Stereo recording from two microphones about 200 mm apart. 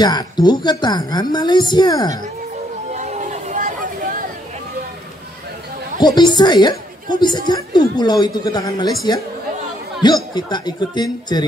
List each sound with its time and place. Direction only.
0.0 s a woman's voice: 20° left (ahead or behind)
2.9 s a sound: 35° right (ahead or behind)
5.9 s a woman's voice: 20° left (ahead or behind)